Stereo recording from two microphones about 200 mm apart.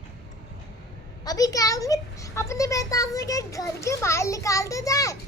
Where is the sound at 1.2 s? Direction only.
20° left (ahead or behind).